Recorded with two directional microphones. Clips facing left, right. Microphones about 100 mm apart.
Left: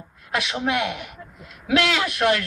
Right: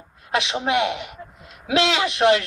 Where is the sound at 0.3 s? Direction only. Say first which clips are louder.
Right 2 dB; 20° right (ahead or behind).